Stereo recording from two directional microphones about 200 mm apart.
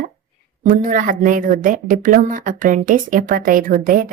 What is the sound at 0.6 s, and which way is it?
A woman's voice, 40° right (ahead or behind).